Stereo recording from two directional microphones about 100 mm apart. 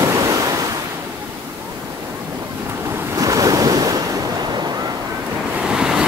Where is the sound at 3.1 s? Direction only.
35° right (ahead or behind).